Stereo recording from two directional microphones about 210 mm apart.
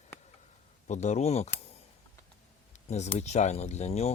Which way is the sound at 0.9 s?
35° left (ahead or behind).